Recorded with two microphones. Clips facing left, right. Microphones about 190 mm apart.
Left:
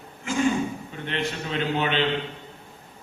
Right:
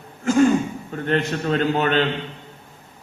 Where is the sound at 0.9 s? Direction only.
45° right (ahead or behind).